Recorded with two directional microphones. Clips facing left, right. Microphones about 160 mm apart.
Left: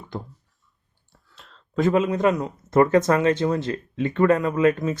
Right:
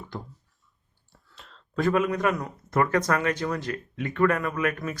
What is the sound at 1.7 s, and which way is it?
Speech, 20° left (ahead or behind).